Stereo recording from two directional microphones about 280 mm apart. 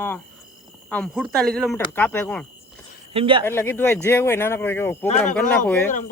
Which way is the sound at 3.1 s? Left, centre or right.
Centre.